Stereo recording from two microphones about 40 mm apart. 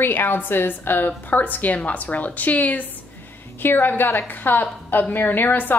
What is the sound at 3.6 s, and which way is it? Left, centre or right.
A woman's voice, left.